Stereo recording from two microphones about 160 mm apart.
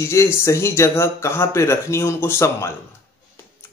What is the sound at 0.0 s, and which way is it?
A man's voice, 15° left (ahead or behind).